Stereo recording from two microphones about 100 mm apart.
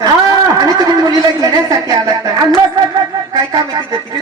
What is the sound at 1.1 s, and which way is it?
Speech, 40° right (ahead or behind).